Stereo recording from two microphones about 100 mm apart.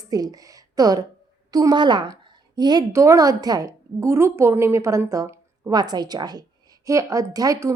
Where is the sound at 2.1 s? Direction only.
45° right (ahead or behind).